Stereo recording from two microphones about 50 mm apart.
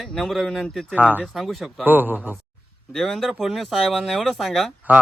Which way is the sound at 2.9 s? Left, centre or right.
Centre.